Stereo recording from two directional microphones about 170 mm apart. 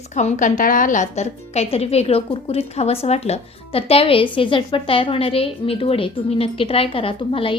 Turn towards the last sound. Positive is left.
turn(degrees=30)  # may be behind; listen again after turning